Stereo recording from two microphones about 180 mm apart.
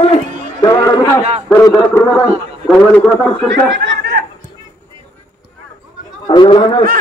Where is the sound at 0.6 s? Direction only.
20° left (ahead or behind).